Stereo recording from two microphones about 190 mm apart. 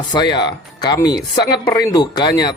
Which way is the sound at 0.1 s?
20° left (ahead or behind).